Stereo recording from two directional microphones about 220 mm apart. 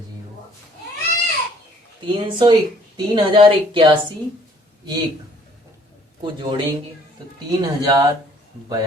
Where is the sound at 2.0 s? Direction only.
20° right (ahead or behind).